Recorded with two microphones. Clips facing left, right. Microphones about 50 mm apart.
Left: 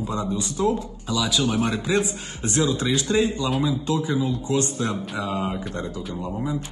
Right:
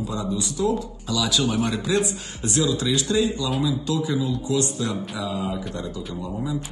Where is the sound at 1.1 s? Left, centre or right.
Centre.